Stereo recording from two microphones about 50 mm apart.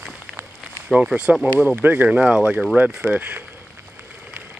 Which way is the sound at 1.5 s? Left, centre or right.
Right.